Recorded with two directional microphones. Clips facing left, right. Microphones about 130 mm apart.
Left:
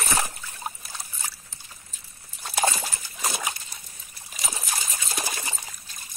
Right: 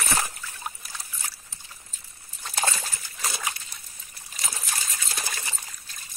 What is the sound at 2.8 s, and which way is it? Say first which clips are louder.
Trickle: left 3 dB; 20° left (ahead or behind).